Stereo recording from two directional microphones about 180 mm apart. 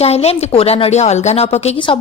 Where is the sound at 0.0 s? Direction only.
35° left (ahead or behind).